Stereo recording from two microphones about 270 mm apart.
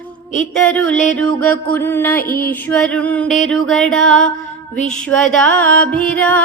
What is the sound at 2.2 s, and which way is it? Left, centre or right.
Music, left.